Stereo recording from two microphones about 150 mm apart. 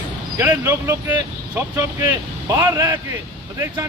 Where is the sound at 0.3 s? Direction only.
15° right (ahead or behind).